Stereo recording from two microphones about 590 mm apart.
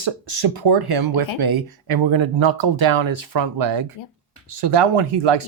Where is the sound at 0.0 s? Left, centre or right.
Right.